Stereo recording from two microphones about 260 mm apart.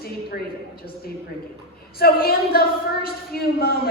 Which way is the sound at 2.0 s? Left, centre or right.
Left.